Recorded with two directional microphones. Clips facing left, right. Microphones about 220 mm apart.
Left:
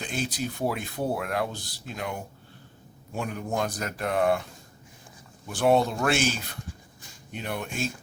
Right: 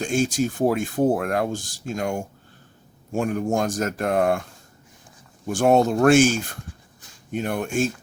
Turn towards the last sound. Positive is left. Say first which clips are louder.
# right 8 dB
turn(degrees=-50)  # may be behind; listen again after turning